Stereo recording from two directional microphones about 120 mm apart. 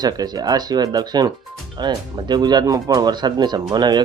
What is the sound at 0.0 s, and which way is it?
Speech, 30° right (ahead or behind).